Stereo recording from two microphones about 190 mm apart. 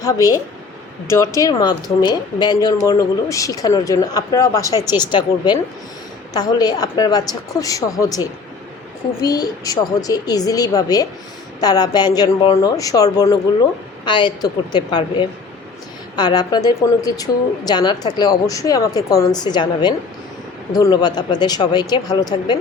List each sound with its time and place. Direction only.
0.0 s a woman's voice: 15° left (ahead or behind)